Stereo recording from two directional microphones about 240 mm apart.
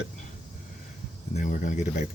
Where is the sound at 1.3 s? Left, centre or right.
Left.